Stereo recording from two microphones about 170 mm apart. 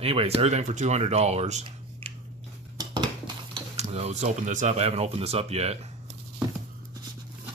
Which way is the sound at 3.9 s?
40° right (ahead or behind).